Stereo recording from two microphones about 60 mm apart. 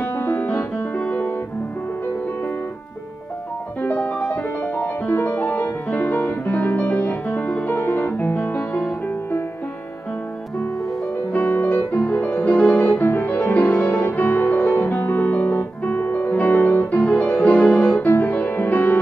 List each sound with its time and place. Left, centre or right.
0.0 s music: left
0.5 s music: left
3.8 s music: left
11.3 s music: left